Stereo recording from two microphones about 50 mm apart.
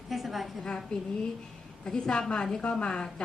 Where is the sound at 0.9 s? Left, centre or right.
Centre.